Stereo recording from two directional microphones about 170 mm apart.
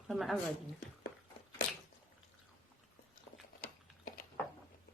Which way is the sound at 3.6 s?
55° left (ahead or behind).